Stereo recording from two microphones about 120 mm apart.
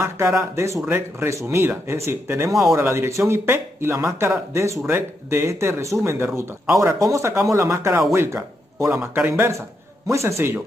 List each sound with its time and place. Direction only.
0.0 s a man's voice: 20° right (ahead or behind)